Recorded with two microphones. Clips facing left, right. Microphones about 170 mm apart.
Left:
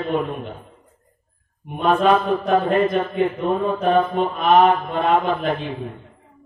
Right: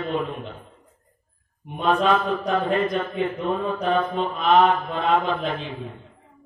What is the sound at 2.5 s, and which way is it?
Mantra, 50° left (ahead or behind).